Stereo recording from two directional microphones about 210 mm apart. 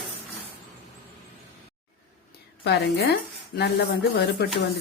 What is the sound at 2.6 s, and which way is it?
Speech, 50° left (ahead or behind).